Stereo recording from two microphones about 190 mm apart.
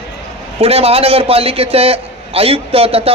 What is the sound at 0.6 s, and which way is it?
A man's voice, 30° right (ahead or behind).